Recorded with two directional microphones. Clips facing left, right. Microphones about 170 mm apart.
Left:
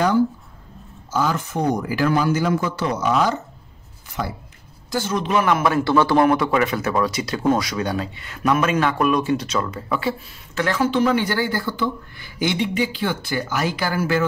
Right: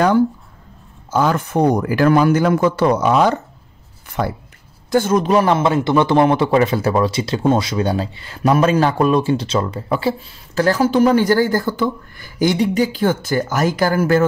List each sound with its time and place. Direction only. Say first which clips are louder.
1.1 s a man's voice: right 5 dB; 55° right (ahead or behind)